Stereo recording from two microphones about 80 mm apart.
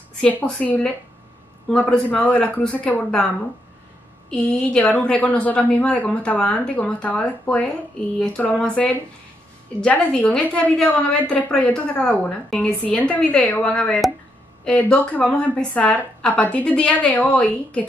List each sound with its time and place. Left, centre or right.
0.6 s a woman's voice: centre
4.3 s a woman's voice: centre